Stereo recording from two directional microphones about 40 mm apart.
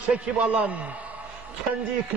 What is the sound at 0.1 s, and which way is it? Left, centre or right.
Speech, right.